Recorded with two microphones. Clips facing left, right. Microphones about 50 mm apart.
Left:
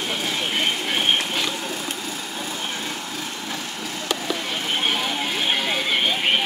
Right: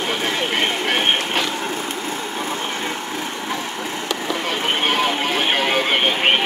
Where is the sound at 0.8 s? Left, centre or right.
Right.